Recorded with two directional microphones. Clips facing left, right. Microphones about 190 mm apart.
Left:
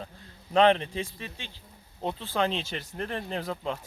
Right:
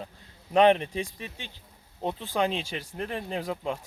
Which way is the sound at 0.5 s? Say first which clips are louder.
Right 1 dB; 15° right (ahead or behind).